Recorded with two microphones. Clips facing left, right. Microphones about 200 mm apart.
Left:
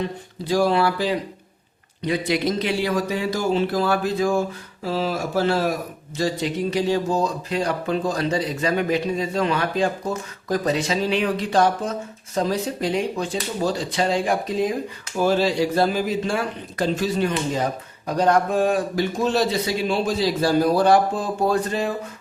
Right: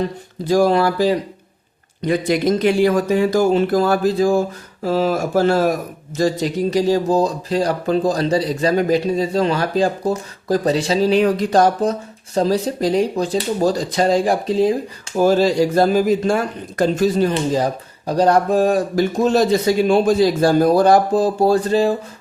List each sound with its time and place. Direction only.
0.0 s speech: 45° right (ahead or behind)
15.1 s speech: 40° right (ahead or behind)